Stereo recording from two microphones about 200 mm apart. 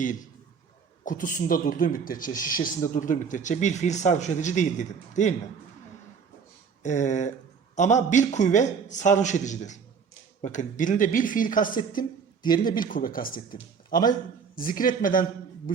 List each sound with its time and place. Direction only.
1.0 s speech: 45° left (ahead or behind)
2.3 s speech: 15° left (ahead or behind)
2.9 s a man's voice: 40° left (ahead or behind)
6.8 s a man's voice: 35° left (ahead or behind)